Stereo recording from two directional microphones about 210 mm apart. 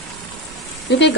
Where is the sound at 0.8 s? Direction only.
55° left (ahead or behind).